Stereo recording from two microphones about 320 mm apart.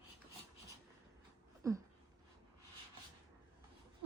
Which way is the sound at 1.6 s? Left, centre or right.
Centre.